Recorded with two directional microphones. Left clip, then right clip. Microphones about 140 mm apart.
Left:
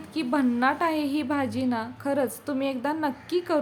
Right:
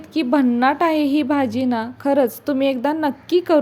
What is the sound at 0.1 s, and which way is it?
A woman's voice, 40° right (ahead or behind).